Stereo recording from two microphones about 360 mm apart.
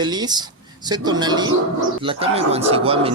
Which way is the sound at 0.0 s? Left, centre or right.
Centre.